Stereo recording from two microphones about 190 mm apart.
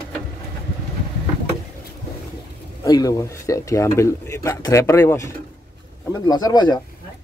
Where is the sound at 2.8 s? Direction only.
20° left (ahead or behind).